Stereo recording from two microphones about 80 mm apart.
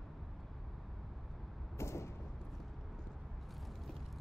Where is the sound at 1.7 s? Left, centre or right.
Left.